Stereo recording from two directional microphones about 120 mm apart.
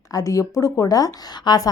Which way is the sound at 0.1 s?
25° left (ahead or behind).